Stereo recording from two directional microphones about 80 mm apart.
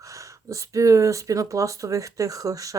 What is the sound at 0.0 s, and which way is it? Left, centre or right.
Speech, right.